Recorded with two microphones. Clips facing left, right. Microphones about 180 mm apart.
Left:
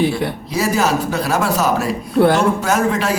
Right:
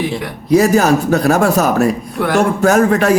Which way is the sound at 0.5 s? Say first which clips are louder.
Right 8 dB; 45° right (ahead or behind).